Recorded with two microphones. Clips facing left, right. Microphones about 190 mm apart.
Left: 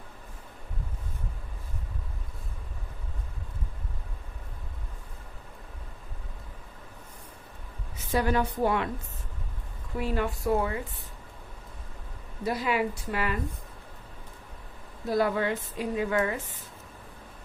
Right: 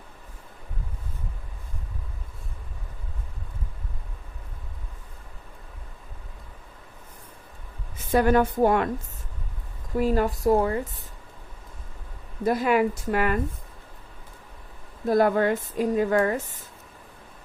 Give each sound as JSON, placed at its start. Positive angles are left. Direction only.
{"t": 8.1, "sound": "speech", "side_deg": -50}
{"t": 10.0, "sound": "speech", "side_deg": -40}
{"t": 12.5, "sound": "speech", "side_deg": -50}
{"t": 15.0, "sound": "speech", "side_deg": -50}